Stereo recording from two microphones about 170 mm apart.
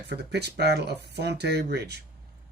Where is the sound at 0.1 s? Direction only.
75° right (ahead or behind).